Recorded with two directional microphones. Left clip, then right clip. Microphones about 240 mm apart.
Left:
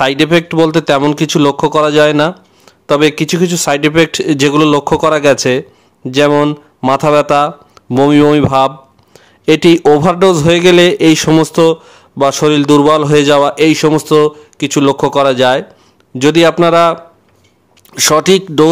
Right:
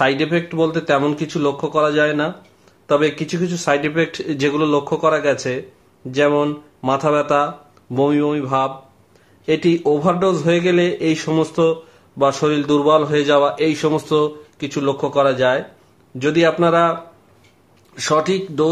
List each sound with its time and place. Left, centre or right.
0.0 s a man's voice: left
17.9 s a man's voice: left